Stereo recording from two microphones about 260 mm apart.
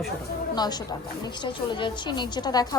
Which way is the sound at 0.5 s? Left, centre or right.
Centre.